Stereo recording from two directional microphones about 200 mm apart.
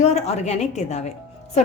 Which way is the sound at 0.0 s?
35° left (ahead or behind).